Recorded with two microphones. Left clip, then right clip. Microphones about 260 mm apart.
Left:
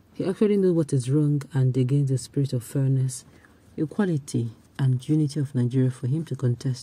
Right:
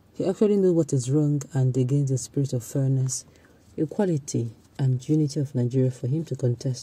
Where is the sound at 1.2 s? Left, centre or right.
Centre.